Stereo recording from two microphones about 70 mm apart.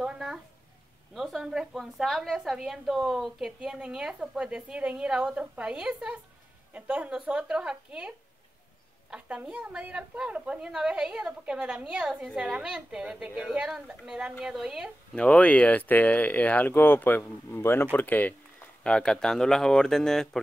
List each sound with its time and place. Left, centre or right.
0.0 s a sound: centre
1.1 s a woman's voice: centre
9.1 s a woman's voice: centre
15.1 s speech: centre; by 17.8 s left
17.9 s speech: left
18.9 s speech: centre